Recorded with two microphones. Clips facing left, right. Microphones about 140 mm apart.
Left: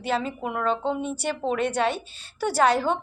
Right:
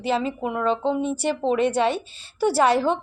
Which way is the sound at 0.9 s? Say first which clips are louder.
Right 4 dB; 30° right (ahead or behind).